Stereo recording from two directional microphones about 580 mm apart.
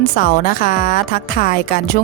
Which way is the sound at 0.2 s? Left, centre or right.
Centre.